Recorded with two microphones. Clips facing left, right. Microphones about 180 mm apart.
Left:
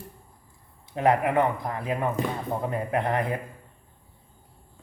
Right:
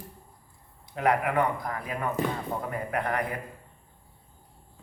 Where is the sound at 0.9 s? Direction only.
30° left (ahead or behind).